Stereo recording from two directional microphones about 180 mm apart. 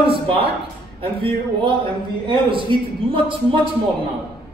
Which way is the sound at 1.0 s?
30° right (ahead or behind).